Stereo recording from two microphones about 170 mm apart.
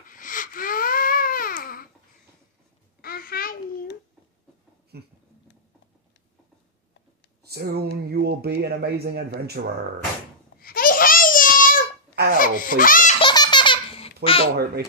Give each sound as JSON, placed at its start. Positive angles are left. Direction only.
{"t": 0.1, "sound": "baby cry", "side_deg": 55}
{"t": 3.0, "sound": "a sound", "side_deg": 60}
{"t": 4.9, "sound": "a sound", "side_deg": -70}
{"t": 7.4, "sound": "speech", "side_deg": -70}
{"t": 10.6, "sound": "babbling", "side_deg": 55}
{"t": 12.4, "sound": "speech", "side_deg": 55}
{"t": 13.2, "sound": "baby laughter", "side_deg": 25}